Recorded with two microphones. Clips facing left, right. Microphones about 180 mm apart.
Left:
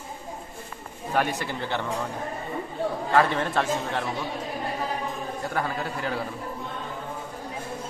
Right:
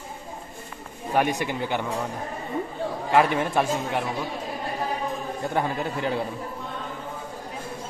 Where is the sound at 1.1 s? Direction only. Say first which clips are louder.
Right 3 dB; 15° right (ahead or behind).